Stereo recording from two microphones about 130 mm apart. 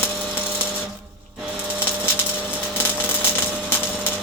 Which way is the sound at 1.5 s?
10° right (ahead or behind).